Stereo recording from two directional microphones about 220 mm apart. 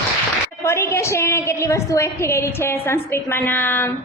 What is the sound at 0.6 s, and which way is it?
A woman's voice, 10° left (ahead or behind).